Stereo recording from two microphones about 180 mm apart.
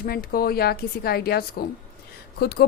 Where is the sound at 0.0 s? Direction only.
55° left (ahead or behind).